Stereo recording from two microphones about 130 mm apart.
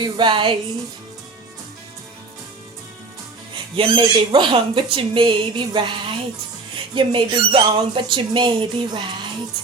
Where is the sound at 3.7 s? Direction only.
40° right (ahead or behind).